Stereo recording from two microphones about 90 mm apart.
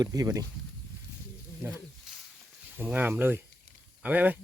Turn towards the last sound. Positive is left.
turn(degrees=-20)  # may be behind; listen again after turning